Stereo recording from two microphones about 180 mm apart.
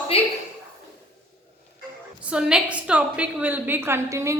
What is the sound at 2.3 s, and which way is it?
A woman's voice, 5° right (ahead or behind).